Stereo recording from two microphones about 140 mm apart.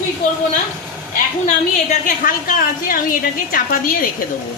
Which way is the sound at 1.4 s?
60° left (ahead or behind).